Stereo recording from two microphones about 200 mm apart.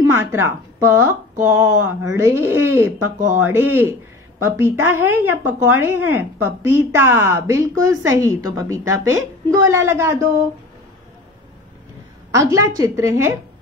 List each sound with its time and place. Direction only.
0.0 s speech: 10° right (ahead or behind)
12.3 s speech: 15° right (ahead or behind)